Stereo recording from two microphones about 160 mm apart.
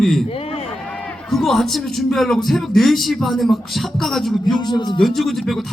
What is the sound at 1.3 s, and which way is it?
Speech, centre (ahead or behind).